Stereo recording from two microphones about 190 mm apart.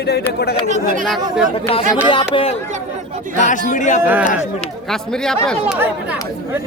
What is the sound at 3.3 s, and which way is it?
Speech, 40° left (ahead or behind).